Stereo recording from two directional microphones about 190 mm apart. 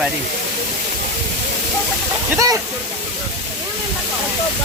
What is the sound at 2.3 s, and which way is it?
Speech, 15° right (ahead or behind).